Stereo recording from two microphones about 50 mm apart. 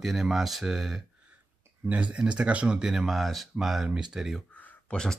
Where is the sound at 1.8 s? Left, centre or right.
Right.